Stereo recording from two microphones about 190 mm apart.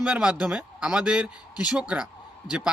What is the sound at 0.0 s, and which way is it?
Speech, 5° right (ahead or behind).